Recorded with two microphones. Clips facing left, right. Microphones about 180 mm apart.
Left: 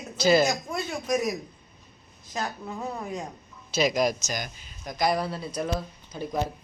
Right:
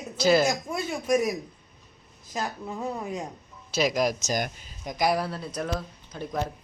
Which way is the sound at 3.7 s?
5° right (ahead or behind).